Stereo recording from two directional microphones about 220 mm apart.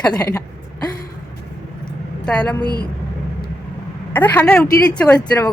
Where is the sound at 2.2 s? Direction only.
5° left (ahead or behind).